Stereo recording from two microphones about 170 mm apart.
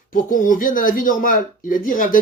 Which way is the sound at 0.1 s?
55° left (ahead or behind).